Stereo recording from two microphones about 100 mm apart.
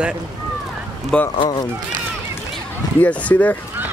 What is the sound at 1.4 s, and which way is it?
Speech, 45° left (ahead or behind).